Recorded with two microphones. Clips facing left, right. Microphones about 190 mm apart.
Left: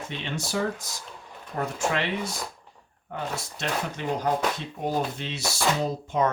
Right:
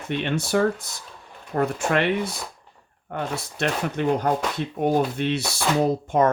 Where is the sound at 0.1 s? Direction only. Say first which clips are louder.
Right 9 dB; 60° right (ahead or behind).